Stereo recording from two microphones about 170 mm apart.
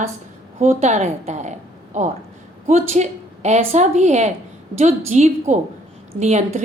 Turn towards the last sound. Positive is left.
turn(degrees=-40)  # may be behind; listen again after turning